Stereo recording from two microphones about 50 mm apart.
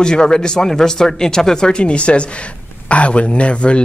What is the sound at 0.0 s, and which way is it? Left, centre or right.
Speech, centre.